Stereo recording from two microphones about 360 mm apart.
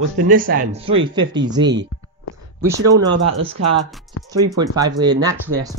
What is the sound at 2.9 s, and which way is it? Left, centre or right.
Speech, centre.